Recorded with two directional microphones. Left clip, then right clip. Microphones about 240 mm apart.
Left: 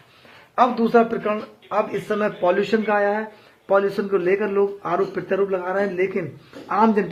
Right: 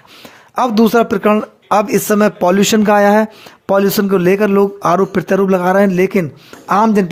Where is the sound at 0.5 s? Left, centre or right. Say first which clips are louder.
Right 5 dB; right.